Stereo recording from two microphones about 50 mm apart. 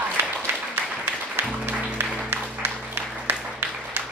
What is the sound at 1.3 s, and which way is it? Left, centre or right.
Music, right.